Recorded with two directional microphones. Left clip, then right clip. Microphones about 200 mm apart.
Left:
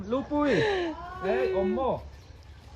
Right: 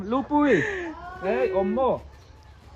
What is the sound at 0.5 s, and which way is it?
Speech, 20° left (ahead or behind).